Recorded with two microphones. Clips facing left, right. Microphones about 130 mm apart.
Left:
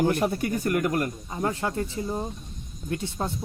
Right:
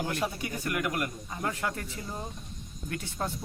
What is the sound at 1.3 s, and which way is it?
Speech, 25° left (ahead or behind).